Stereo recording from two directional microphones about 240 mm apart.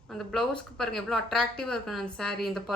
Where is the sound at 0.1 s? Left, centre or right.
Centre.